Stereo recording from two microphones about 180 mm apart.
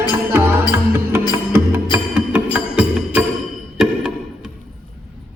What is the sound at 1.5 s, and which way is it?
Music, 10° right (ahead or behind).